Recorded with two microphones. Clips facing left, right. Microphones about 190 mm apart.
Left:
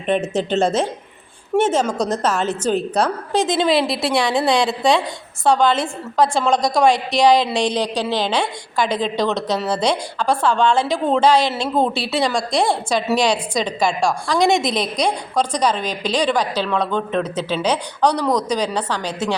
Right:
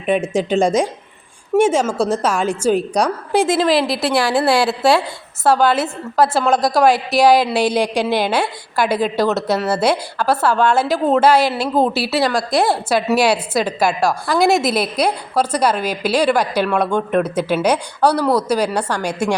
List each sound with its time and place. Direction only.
0.0 s a woman's voice: 10° right (ahead or behind)